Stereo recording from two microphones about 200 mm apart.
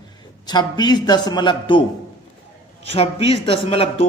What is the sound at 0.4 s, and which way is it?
Speech, 20° left (ahead or behind).